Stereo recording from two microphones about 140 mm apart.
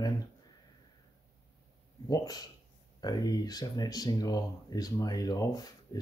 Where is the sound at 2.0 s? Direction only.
25° left (ahead or behind).